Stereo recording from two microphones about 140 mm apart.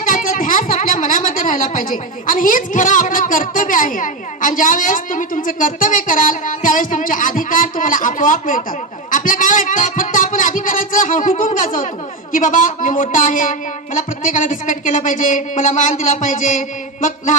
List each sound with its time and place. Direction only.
0.0 s speech: 70° left (ahead or behind)
9.0 s a sound: 70° left (ahead or behind)
12.3 s speech: 70° left (ahead or behind)